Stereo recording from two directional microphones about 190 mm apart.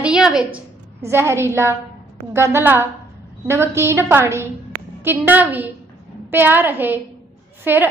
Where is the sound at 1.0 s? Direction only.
15° right (ahead or behind).